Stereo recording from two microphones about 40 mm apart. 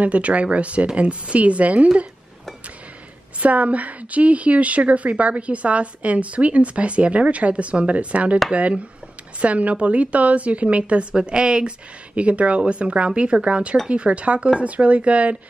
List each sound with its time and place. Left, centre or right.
0.0 s a woman's voice: right
3.3 s a woman's voice: right